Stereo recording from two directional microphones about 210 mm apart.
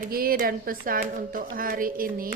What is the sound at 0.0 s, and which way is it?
Speech, 45° right (ahead or behind).